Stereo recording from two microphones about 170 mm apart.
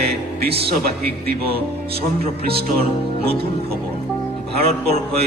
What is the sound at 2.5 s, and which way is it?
Music, 70° right (ahead or behind).